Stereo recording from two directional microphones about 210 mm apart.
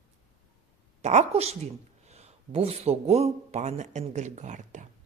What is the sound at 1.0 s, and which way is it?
A woman's voice, 35° right (ahead or behind).